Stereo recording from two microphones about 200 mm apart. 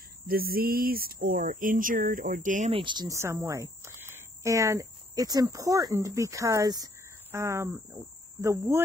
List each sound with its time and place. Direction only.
0.3 s speech: 50° right (ahead or behind)
2.7 s speech: 25° right (ahead or behind)